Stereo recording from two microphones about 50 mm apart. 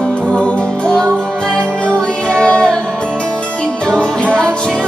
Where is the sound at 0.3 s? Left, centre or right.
Centre.